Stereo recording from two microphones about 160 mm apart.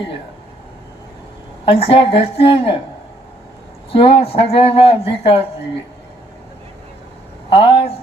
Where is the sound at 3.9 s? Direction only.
35° left (ahead or behind).